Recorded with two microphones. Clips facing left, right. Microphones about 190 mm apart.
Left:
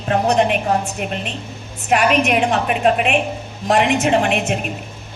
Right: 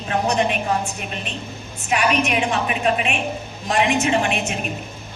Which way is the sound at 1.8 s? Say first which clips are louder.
Left 4 dB; 60° left (ahead or behind).